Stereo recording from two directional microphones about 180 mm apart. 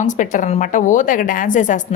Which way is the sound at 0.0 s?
45° left (ahead or behind).